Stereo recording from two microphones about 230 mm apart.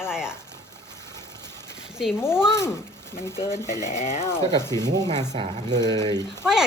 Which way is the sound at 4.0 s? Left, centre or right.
Left.